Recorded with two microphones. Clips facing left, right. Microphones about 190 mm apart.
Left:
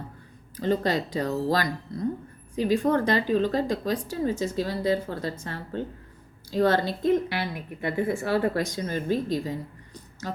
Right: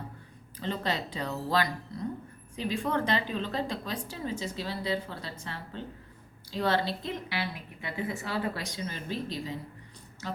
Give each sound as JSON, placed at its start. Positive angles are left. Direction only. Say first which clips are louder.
{"t": 0.5, "sound": "a woman's voice", "louder": "left 8 dB", "side_deg": 45}